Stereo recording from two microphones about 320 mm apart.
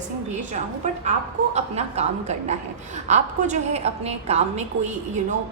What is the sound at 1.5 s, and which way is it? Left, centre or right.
A woman's voice, centre.